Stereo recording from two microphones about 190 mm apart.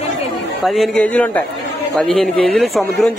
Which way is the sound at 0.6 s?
Centre (ahead or behind).